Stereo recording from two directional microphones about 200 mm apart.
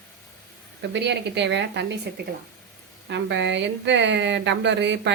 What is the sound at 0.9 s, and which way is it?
A woman's voice, 60° right (ahead or behind).